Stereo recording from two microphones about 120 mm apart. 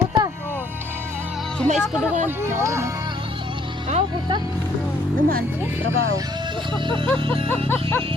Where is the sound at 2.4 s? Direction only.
20° right (ahead or behind).